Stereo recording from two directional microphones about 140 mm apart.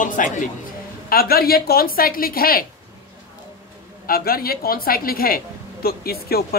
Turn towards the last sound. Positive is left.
turn(degrees=90)